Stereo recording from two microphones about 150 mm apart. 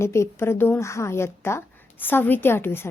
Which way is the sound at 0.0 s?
15° left (ahead or behind).